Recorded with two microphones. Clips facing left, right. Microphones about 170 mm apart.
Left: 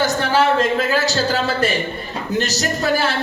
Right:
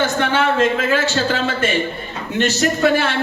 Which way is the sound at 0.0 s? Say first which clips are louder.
Left 1 dB; 40° left (ahead or behind).